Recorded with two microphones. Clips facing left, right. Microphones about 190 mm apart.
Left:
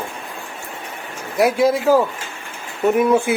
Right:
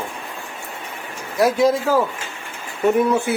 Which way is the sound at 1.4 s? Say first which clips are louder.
Left 1 dB; 10° left (ahead or behind).